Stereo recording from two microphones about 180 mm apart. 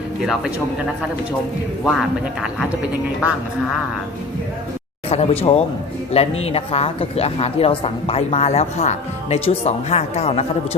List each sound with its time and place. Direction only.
1.8 s speech: centre (ahead or behind)
5.0 s a woman's voice: 35° left (ahead or behind)